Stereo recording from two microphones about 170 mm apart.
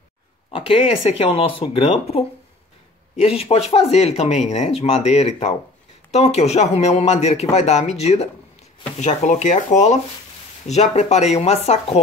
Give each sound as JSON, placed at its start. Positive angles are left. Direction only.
{"t": 0.5, "sound": "speech", "side_deg": 30}